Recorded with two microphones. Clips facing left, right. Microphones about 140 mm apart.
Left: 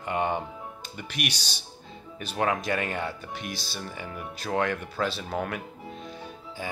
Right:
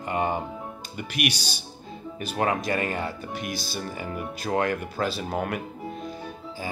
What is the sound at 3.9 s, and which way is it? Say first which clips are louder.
Speech: right 5 dB; 5° right (ahead or behind).